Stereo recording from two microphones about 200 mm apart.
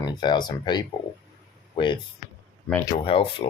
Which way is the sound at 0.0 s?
20° left (ahead or behind).